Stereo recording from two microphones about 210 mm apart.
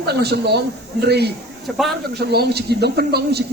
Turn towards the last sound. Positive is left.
turn(degrees=-50)  # may be behind; listen again after turning